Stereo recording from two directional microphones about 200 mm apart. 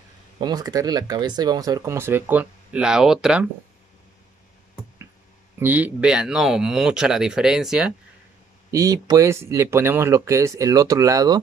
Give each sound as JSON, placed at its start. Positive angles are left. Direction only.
{"t": 0.4, "sound": "speech", "side_deg": -20}
{"t": 5.6, "sound": "speech", "side_deg": -10}
{"t": 8.7, "sound": "speech", "side_deg": -15}